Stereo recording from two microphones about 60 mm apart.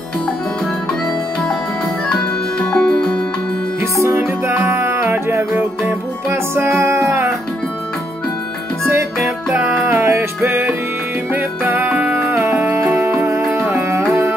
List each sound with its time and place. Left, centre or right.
2.7 s music: centre
4.0 s music: right
9.8 s music: right
11.3 s music: right
13.7 s tabla: right